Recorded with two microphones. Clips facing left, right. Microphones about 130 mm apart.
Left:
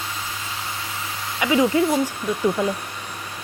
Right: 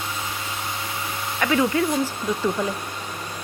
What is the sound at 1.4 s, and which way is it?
Speech, 15° left (ahead or behind).